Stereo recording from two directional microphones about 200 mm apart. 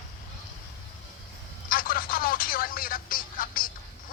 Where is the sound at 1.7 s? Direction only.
45° left (ahead or behind).